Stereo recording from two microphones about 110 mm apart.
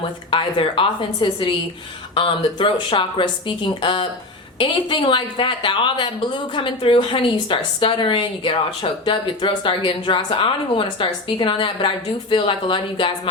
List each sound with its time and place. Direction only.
0.3 s a woman's voice: 50° left (ahead or behind)